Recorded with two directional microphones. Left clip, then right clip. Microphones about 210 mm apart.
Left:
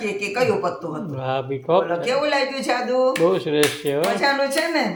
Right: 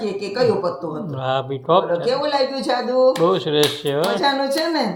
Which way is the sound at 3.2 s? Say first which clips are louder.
Right 1 dB; 5° right (ahead or behind).